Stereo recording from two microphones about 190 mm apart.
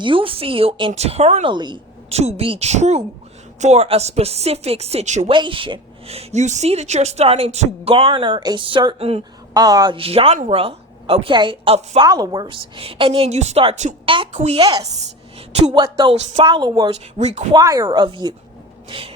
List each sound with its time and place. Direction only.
0.0 s a woman's voice: 25° right (ahead or behind)
5.3 s speech: 25° right (ahead or behind)
9.6 s a woman's voice: 20° right (ahead or behind)
16.1 s speech: 35° right (ahead or behind)
16.5 s a woman's voice: 20° right (ahead or behind)
16.9 s speech: 35° right (ahead or behind)
17.5 s a woman's voice: 20° right (ahead or behind)
18.9 s a sound: 30° right (ahead or behind)